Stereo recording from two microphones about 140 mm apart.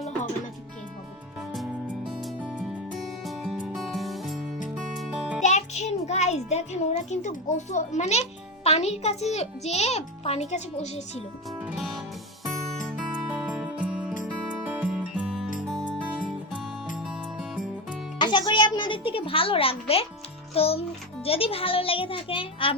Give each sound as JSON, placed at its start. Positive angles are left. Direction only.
{"t": 2.2, "sound": "music", "side_deg": 0}
{"t": 5.4, "sound": "a child's voice", "side_deg": 55}
{"t": 11.8, "sound": "music", "side_deg": 0}
{"t": 13.3, "sound": "music", "side_deg": -5}
{"t": 15.7, "sound": "music", "side_deg": 5}
{"t": 18.2, "sound": "a woman's voice", "side_deg": 30}